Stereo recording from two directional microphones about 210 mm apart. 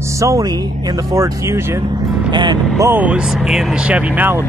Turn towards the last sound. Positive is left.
turn(degrees=-10)  # may be behind; listen again after turning